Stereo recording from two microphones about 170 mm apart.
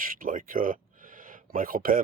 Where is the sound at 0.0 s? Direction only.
55° right (ahead or behind).